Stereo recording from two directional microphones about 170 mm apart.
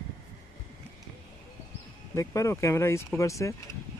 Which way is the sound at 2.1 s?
15° left (ahead or behind).